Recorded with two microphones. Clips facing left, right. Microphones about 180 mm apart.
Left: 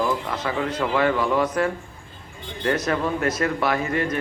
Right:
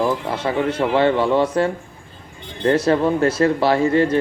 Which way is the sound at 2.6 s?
30° right (ahead or behind).